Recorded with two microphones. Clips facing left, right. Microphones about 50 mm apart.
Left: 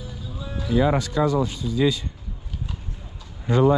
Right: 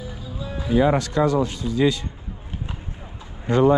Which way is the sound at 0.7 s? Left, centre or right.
Right.